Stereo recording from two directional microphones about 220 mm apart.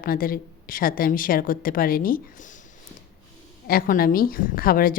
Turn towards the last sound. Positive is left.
turn(degrees=40)  # may be behind; listen again after turning